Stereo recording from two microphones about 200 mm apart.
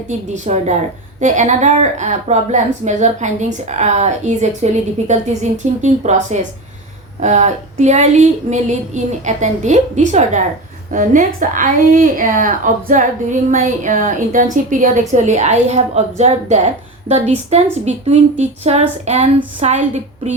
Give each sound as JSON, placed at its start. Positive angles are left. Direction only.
{"t": 0.1, "sound": "a woman's voice", "side_deg": -35}